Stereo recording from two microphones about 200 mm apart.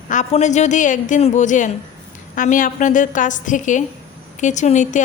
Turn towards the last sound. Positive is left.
turn(degrees=35)  # may be behind; listen again after turning